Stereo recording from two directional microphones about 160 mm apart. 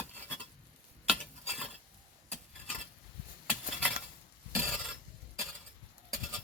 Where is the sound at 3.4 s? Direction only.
Centre (ahead or behind).